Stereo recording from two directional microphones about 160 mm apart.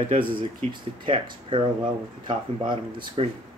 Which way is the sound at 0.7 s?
30° right (ahead or behind).